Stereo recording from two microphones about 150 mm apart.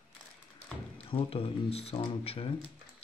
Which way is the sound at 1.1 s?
40° left (ahead or behind).